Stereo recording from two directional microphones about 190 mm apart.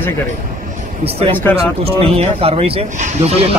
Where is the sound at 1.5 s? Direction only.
30° right (ahead or behind).